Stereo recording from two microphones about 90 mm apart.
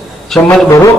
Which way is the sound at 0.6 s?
35° left (ahead or behind).